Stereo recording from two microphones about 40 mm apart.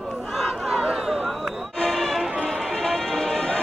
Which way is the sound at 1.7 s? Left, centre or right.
Centre.